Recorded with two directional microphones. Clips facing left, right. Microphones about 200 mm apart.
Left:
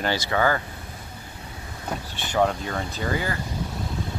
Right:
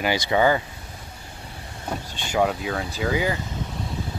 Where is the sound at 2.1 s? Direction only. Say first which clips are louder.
Even; 15° right (ahead or behind).